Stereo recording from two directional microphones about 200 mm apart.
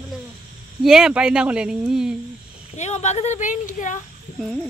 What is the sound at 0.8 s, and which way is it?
Speech, 5° right (ahead or behind).